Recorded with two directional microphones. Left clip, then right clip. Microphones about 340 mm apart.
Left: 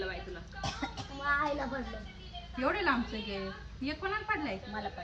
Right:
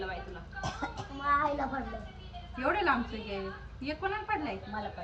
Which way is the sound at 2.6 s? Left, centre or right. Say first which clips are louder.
Right 2 dB; centre.